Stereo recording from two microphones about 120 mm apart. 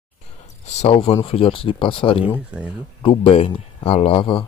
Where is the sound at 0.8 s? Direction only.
55° left (ahead or behind).